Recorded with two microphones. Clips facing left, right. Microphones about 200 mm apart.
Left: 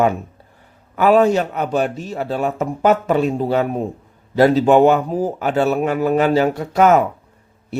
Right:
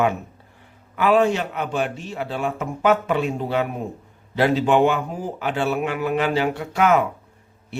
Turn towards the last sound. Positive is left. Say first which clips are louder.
# left 7 dB
turn(degrees=40)  # may be behind; listen again after turning